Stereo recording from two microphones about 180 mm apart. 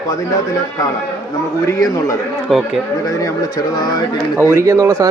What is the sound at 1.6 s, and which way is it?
Speech, 20° left (ahead or behind).